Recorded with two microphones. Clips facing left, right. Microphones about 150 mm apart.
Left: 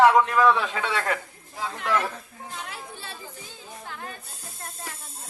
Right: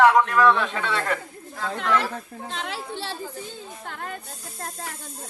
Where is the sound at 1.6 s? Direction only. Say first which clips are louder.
Right 2 dB; 80° right.